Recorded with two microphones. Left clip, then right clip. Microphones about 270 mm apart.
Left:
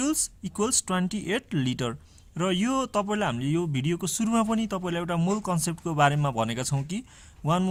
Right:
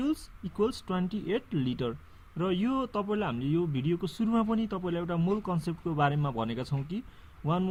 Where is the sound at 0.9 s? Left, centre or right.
Left.